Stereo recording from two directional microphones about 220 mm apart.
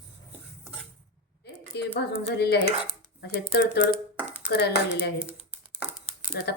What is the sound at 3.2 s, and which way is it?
A woman's voice, 50° left (ahead or behind).